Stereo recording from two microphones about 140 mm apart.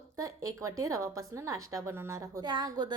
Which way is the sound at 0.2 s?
25° right (ahead or behind).